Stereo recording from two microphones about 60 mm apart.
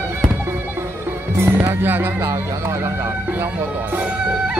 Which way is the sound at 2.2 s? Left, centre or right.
Right.